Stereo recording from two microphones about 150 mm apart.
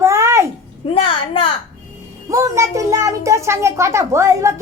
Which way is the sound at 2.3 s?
20° right (ahead or behind).